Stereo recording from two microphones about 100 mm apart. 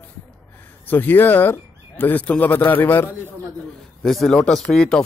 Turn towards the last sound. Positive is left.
turn(degrees=10)  # may be behind; listen again after turning